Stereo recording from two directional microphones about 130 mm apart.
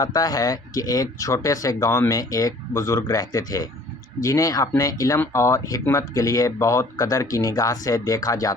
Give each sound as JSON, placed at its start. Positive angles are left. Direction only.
{"t": 0.0, "sound": "speech", "side_deg": 30}